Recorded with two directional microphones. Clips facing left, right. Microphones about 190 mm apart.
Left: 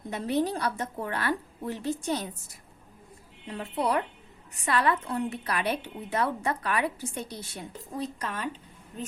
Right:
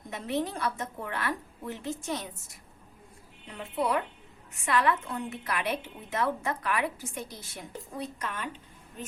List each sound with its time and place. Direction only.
0.1 s a woman's voice: 35° left (ahead or behind)
3.4 s a woman's voice: 35° left (ahead or behind)